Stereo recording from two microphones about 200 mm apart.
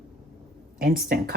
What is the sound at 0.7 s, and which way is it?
Speech, 45° right (ahead or behind).